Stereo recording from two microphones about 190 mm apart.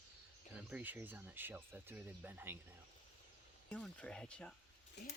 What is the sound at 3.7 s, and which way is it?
Speech, 5° left (ahead or behind).